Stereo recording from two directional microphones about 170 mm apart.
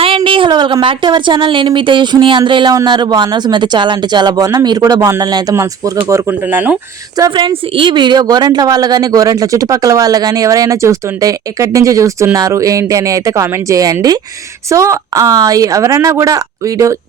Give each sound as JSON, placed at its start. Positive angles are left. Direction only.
{"t": 0.2, "sound": "a woman's voice", "side_deg": -30}
{"t": 7.2, "sound": "a woman's voice", "side_deg": -30}